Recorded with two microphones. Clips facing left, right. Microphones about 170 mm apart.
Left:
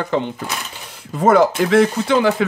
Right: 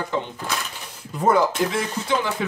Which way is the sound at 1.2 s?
75° left (ahead or behind).